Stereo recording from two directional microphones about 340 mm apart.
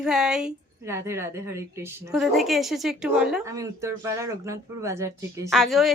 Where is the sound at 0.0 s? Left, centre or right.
Centre.